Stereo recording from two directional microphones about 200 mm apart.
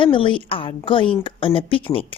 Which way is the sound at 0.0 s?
25° left (ahead or behind).